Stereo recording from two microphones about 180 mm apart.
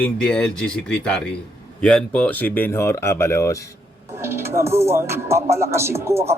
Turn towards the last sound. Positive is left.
turn(degrees=-15)  # may be behind; listen again after turning